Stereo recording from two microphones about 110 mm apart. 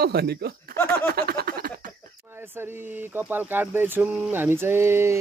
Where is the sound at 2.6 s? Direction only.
20° right (ahead or behind).